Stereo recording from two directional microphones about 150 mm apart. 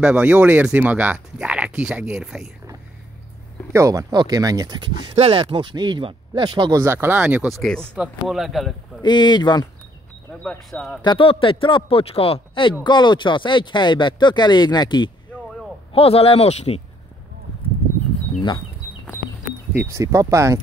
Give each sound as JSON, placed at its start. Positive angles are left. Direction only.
{"t": 0.0, "sound": "speech", "side_deg": -10}
{"t": 3.7, "sound": "speech", "side_deg": -20}
{"t": 5.1, "sound": "speech", "side_deg": -40}
{"t": 6.8, "sound": "speech", "side_deg": -15}
{"t": 7.4, "sound": "speech", "side_deg": 0}
{"t": 7.8, "sound": "speech", "side_deg": -10}
{"t": 8.3, "sound": "speech", "side_deg": 0}
{"t": 9.0, "sound": "speech", "side_deg": 30}
{"t": 10.3, "sound": "speech", "side_deg": 5}
{"t": 11.0, "sound": "speech", "side_deg": 35}
{"t": 15.9, "sound": "speech", "side_deg": 40}
{"t": 19.7, "sound": "speech", "side_deg": -15}